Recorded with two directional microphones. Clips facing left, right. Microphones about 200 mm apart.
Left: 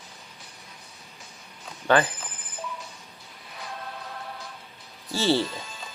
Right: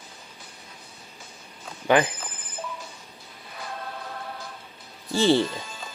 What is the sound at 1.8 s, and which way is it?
Speech, 15° right (ahead or behind).